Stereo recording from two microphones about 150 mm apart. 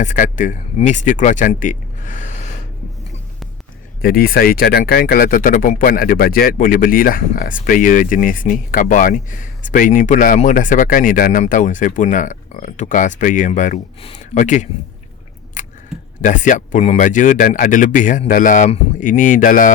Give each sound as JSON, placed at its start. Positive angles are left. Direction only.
{"t": 0.0, "sound": "speech", "side_deg": 55}
{"t": 4.0, "sound": "speech", "side_deg": 80}
{"t": 15.6, "sound": "a sound", "side_deg": 55}
{"t": 16.2, "sound": "speech", "side_deg": 60}